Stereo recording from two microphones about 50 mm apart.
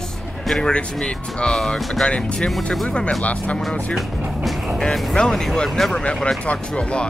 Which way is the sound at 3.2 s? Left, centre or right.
Left.